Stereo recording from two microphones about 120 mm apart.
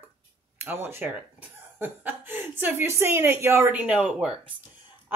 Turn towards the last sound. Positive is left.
turn(degrees=-10)  # may be behind; listen again after turning